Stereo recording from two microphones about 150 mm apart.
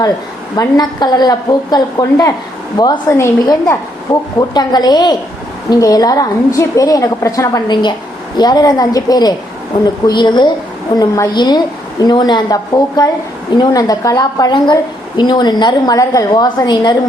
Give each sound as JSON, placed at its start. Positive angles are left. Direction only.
{"t": 0.5, "sound": "a woman's voice", "side_deg": 25}